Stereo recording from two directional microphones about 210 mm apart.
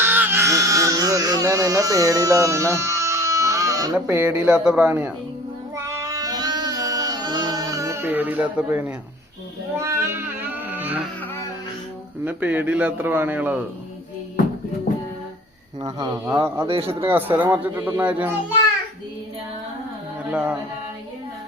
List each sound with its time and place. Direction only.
0.0 s baby cry: 10° right (ahead or behind)
5.7 s child singing: 15° right (ahead or behind)
9.7 s a sound: 15° right (ahead or behind)
12.2 s a man's voice: 5° right (ahead or behind)
15.8 s speech: 20° right (ahead or behind)
16.6 s speech: 25° right (ahead or behind)
17.1 s a man's voice: 10° right (ahead or behind)
20.3 s a man's voice: 5° right (ahead or behind)